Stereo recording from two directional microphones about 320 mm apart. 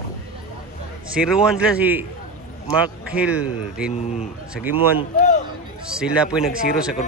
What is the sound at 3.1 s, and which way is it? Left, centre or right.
Speech, centre.